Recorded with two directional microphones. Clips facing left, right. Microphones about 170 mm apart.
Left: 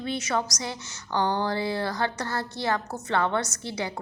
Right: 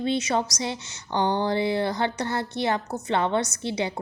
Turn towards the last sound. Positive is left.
turn(degrees=-20)  # may be behind; listen again after turning